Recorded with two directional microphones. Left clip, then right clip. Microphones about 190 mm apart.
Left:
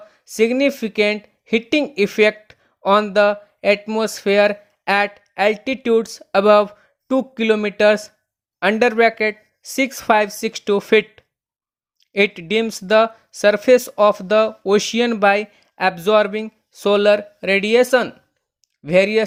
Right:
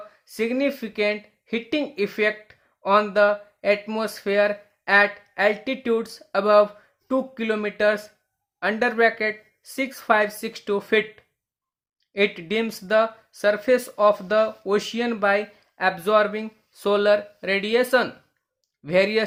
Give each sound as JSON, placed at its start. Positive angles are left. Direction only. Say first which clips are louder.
{"t": 0.1, "sound": "speech", "louder": "left 9 dB", "side_deg": 35}